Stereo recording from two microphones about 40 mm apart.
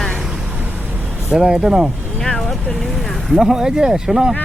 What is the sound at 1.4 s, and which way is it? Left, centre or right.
Speech, centre.